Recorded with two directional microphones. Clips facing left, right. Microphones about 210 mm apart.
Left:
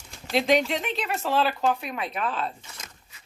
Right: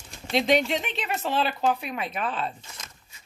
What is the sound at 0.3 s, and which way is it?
Speech, centre (ahead or behind).